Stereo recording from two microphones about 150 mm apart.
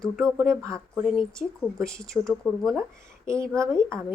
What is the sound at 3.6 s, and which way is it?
Speech, 20° right (ahead or behind).